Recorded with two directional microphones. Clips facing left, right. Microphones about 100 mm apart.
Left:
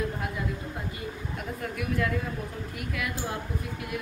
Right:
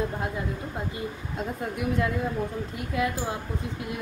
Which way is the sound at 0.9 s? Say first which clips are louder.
Right 3 dB; 25° right (ahead or behind).